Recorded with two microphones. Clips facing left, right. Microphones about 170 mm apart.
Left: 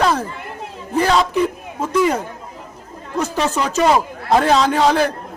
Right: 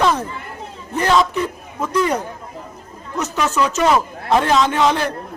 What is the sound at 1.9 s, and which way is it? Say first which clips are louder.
Speech: left 2 dB; 10° left (ahead or behind).